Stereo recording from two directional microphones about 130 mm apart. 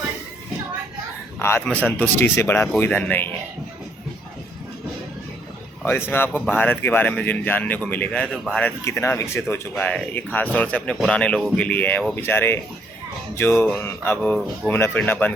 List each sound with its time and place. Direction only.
1.4 s a man's voice: 20° left (ahead or behind)
5.8 s a man's voice: 15° left (ahead or behind)
8.8 s speech: 20° left (ahead or behind)
9.7 s a man's voice: 5° left (ahead or behind)